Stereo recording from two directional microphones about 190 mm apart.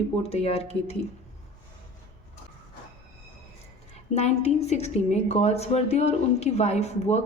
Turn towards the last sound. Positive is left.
turn(degrees=35)  # may be behind; listen again after turning